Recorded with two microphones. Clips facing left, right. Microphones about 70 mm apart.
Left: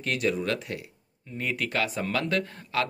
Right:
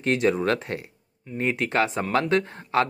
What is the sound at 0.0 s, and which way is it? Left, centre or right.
Speech, right.